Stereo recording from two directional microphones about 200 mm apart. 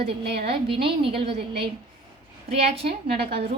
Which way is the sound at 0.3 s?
55° right (ahead or behind).